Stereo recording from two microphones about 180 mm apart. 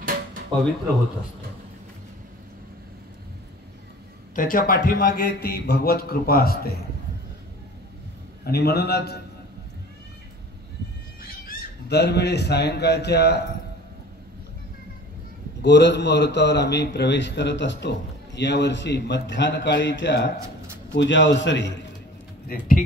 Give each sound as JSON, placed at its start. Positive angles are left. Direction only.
{"t": 0.0, "sound": "a sound", "side_deg": -50}
{"t": 4.4, "sound": "a man's voice", "side_deg": 50}
{"t": 8.5, "sound": "a man's voice", "side_deg": 60}
{"t": 11.2, "sound": "speech", "side_deg": 60}
{"t": 15.6, "sound": "a man's voice", "side_deg": 70}
{"t": 22.5, "sound": "speech", "side_deg": 60}